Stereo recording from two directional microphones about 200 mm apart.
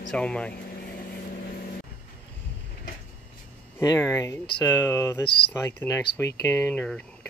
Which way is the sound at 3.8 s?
15° left (ahead or behind).